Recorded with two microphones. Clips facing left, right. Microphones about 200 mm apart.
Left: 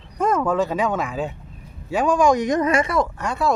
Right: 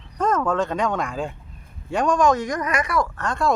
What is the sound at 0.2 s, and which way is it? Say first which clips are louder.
Speech: left 2 dB; 10° left (ahead or behind).